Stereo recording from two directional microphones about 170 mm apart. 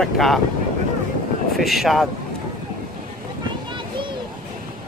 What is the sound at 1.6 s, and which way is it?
Speech, centre (ahead or behind).